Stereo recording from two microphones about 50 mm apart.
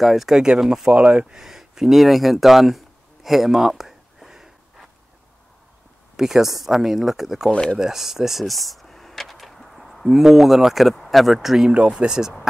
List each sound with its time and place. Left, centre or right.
0.0 s speech: centre; by 1.3 s right
1.3 s speech: centre
3.3 s a sound: centre
6.1 s speech: centre